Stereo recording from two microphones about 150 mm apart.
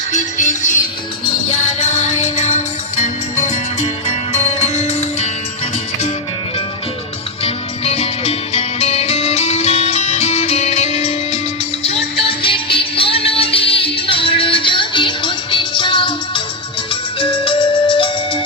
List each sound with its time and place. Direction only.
0.1 s music: 55° left (ahead or behind)
1.6 s music: 50° left (ahead or behind)
7.4 s music: 45° left (ahead or behind)
12.4 s music: 35° left (ahead or behind)